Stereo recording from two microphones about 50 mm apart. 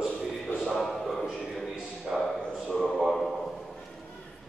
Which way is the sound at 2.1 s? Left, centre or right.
Centre.